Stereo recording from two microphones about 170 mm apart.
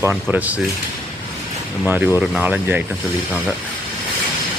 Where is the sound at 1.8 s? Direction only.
10° right (ahead or behind).